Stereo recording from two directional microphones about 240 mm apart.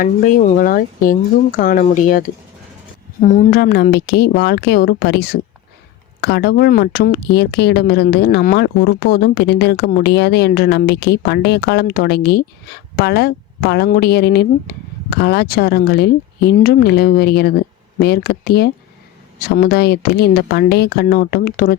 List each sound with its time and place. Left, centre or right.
0.0 s speech: left